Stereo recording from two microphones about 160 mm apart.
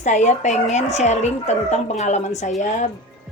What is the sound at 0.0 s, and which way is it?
A woman's voice, 50° left (ahead or behind).